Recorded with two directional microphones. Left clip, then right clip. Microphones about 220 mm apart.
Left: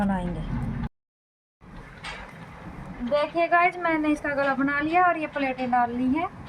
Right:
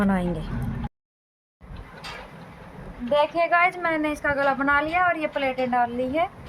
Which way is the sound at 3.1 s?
50° right (ahead or behind).